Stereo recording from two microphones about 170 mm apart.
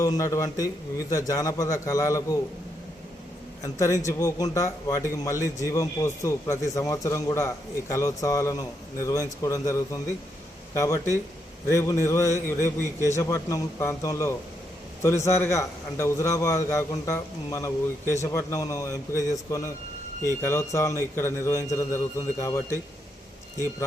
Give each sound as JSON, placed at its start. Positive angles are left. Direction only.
{"t": 0.0, "sound": "a man's voice", "side_deg": 20}
{"t": 3.6, "sound": "a man's voice", "side_deg": 20}